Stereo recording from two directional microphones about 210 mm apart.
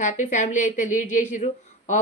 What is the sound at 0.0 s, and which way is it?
Speech, 35° left (ahead or behind).